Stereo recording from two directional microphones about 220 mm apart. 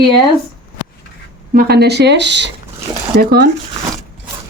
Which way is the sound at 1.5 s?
45° right (ahead or behind).